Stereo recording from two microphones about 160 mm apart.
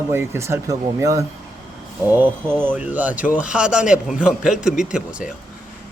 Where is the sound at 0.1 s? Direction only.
15° right (ahead or behind).